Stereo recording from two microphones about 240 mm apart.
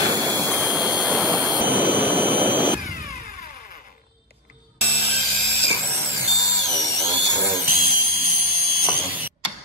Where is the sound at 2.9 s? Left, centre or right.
Left.